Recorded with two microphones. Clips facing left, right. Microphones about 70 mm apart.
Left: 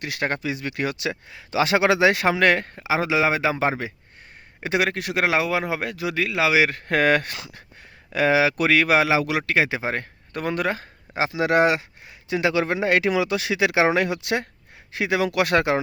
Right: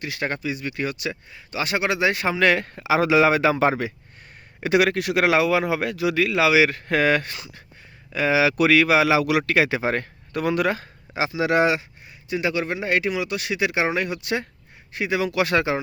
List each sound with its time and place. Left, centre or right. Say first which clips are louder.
0.0 s speech: left 1 dB; left
0.4 s speech: left 1 dB; left
1.3 s a man's voice: left 7 dB; left
2.4 s a man's voice: right 2 dB; left
2.7 s a man's voice: right 4 dB; left
8.4 s a man's voice: right 2 dB; left
10.3 s speech: right 3 dB; left
12.3 s a man's voice: left 3 dB; left